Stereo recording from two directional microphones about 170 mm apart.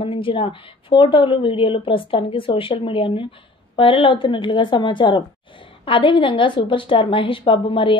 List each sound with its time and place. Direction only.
0.0 s speech: 30° left (ahead or behind)